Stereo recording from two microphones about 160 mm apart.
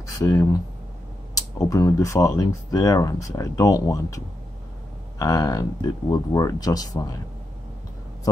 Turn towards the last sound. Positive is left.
turn(degrees=25)  # may be behind; listen again after turning